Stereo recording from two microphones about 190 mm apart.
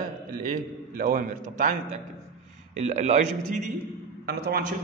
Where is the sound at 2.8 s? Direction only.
40° right (ahead or behind).